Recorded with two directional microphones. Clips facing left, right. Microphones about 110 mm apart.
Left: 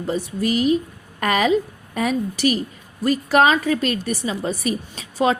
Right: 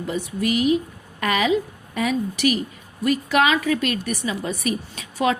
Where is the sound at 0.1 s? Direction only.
35° left (ahead or behind).